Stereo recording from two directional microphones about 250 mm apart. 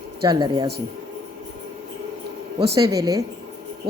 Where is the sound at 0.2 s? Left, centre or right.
Centre.